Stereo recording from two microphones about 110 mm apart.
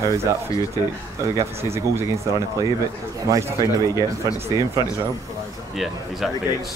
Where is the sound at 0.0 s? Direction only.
25° right (ahead or behind).